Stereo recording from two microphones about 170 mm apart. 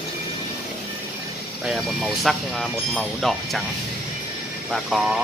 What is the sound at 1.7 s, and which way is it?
Speech, centre (ahead or behind).